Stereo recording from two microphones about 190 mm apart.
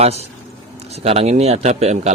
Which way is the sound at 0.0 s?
35° right (ahead or behind).